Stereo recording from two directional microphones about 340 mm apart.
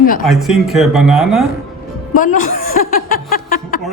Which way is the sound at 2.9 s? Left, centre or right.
Left.